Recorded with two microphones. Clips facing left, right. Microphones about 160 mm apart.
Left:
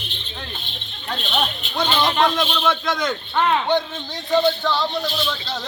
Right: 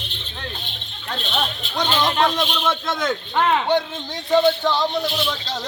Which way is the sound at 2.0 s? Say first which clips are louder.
Left 1 dB; 5° right (ahead or behind).